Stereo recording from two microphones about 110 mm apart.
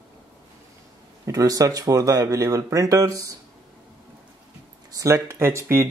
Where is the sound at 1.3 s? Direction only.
35° right (ahead or behind).